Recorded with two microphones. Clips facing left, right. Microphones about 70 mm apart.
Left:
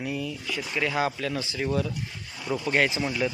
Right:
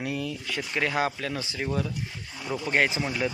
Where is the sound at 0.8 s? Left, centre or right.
Right.